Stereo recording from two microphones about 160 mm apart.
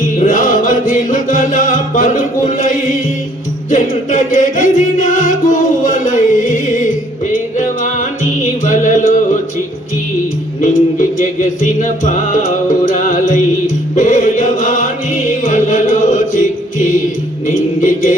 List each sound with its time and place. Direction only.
0.0 s music: 55° left (ahead or behind)
8.6 s music: 50° left (ahead or behind)
10.9 s music: 55° left (ahead or behind)
13.9 s choir: 55° left (ahead or behind)
15.5 s music: 50° left (ahead or behind)
17.4 s music: 55° left (ahead or behind)